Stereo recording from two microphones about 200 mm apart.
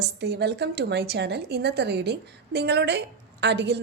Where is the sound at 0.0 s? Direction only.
55° right (ahead or behind).